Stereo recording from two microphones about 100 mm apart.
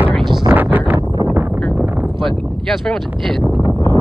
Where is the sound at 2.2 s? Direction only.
5° left (ahead or behind).